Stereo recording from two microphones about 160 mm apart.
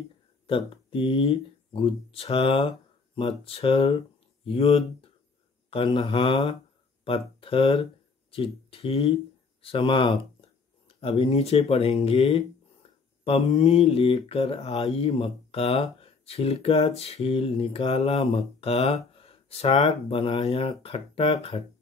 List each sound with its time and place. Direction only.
0.5 s speech: 35° left (ahead or behind)
12.8 s a sound: 35° left (ahead or behind)
13.2 s speech: 40° left (ahead or behind)